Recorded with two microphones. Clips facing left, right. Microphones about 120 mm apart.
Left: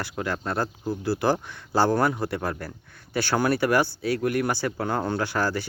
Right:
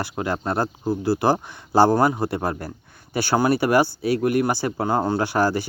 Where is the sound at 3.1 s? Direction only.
10° right (ahead or behind).